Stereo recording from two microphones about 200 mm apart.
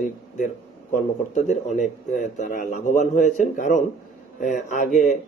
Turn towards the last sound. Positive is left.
turn(degrees=40)  # may be behind; listen again after turning